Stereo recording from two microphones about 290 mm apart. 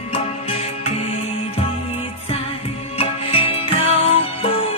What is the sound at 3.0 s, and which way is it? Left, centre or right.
Music, centre.